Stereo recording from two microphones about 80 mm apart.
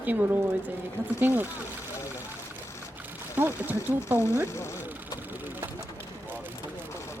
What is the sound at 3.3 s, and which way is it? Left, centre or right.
Speech, right.